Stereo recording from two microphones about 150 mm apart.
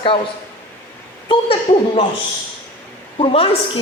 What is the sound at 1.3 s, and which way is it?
Speech, 35° left (ahead or behind).